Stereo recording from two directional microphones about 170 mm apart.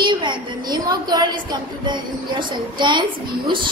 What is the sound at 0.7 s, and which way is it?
Speech, 25° right (ahead or behind).